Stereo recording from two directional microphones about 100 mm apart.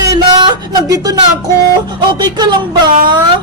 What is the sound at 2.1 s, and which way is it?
Speech, 45° right (ahead or behind).